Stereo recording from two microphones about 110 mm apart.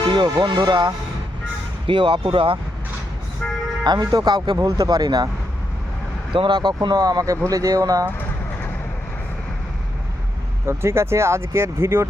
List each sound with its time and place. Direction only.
0.1 s speech: 45° right (ahead or behind)
3.8 s speech: 40° right (ahead or behind)
6.3 s speech: 45° right (ahead or behind)
10.7 s speech: 25° right (ahead or behind)